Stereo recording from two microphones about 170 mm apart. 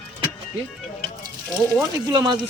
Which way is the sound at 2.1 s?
25° right (ahead or behind).